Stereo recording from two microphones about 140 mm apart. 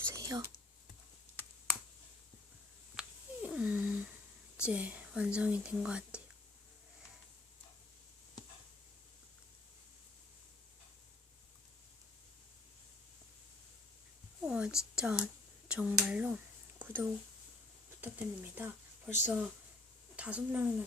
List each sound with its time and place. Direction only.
0.1 s whispering: 25° right (ahead or behind)
1.4 s finger snapping: 15° left (ahead or behind)
2.9 s finger snapping: 5° right (ahead or behind)
4.5 s speech: 10° right (ahead or behind)
14.4 s a sound: 5° right (ahead or behind)
14.9 s speech: 5° right (ahead or behind)
16.7 s a sound: 15° right (ahead or behind)
18.0 s speech: 15° right (ahead or behind)